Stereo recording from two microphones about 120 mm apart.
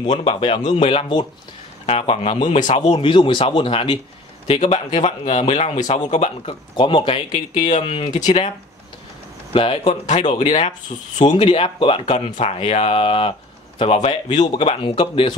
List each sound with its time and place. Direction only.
0.0 s a man's voice: 50° left (ahead or behind)
1.9 s a man's voice: 60° left (ahead or behind)
4.5 s speech: 65° left (ahead or behind)
6.4 s a man's voice: 45° left (ahead or behind)
8.1 s speech: 80° left
9.5 s a man's voice: 50° left (ahead or behind)
10.0 s speech: 90° left
10.4 s speech: 55° left (ahead or behind)
11.1 s speech: 80° left
11.4 s a man's voice: 50° left (ahead or behind)
14.0 s speech: 70° left (ahead or behind); by 15.3 s 45° left (ahead or behind)